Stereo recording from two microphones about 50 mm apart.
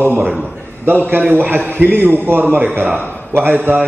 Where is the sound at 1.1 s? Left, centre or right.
Right.